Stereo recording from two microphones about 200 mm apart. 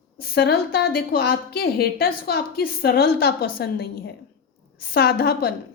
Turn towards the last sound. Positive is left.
turn(degrees=50)  # may be behind; listen again after turning